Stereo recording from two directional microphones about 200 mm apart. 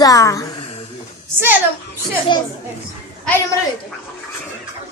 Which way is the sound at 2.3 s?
20° left (ahead or behind).